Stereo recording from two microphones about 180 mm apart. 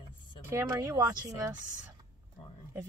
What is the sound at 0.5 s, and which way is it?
Speech, 15° right (ahead or behind).